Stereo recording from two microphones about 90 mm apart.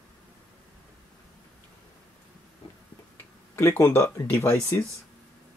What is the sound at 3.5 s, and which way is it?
Speech, 30° left (ahead or behind).